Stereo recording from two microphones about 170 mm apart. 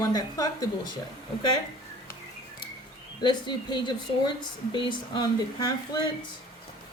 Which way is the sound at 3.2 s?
25° left (ahead or behind).